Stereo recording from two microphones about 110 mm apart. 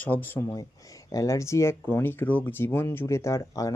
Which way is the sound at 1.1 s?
30° left (ahead or behind).